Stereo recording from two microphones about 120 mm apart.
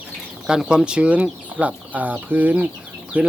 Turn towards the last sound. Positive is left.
turn(degrees=-10)  # may be behind; listen again after turning